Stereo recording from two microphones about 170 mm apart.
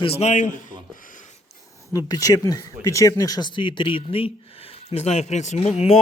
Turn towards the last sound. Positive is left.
turn(degrees=40)  # may be behind; listen again after turning